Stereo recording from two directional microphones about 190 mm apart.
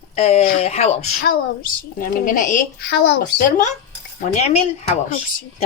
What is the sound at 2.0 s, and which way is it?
Speech, 45° left (ahead or behind).